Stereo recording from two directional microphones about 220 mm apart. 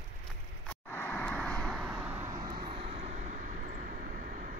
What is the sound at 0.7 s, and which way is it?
Vehicle, 10° left (ahead or behind).